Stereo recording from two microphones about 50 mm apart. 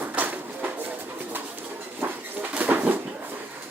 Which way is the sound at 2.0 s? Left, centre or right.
Right.